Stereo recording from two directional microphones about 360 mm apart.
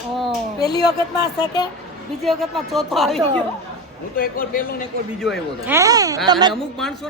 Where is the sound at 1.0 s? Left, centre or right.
Centre.